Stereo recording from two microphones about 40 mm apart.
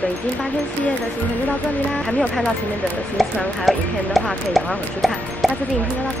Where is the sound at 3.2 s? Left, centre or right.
Centre.